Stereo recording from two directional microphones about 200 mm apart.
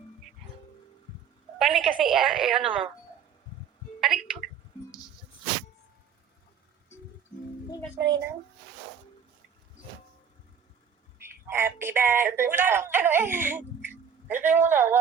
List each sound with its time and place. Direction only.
1.5 s a woman's voice: centre (ahead or behind)
4.0 s a sound: centre (ahead or behind)
7.9 s a child's voice: 20° right (ahead or behind)
11.2 s speech: 10° right (ahead or behind)